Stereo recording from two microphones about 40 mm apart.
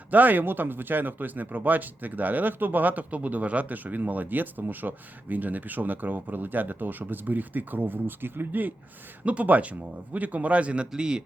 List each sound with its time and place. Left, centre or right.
0.1 s speech: right
9.2 s a man's voice: right
10.9 s a man's voice: right